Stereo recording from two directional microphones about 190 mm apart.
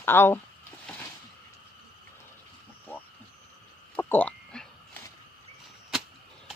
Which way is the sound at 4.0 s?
10° left (ahead or behind).